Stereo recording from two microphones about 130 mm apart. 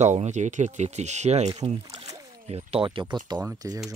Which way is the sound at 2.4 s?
50° right (ahead or behind).